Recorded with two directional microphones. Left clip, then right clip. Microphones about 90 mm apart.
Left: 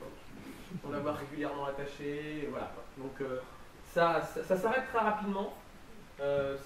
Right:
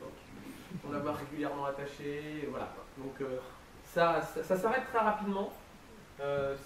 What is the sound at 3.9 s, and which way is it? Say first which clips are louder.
Speech: even; 5° right (ahead or behind).